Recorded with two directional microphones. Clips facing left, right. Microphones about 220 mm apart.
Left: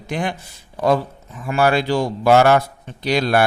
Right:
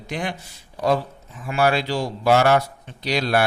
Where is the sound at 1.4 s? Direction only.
50° left (ahead or behind).